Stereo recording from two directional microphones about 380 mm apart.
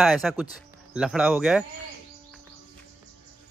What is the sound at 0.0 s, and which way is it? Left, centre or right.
A man's voice, centre.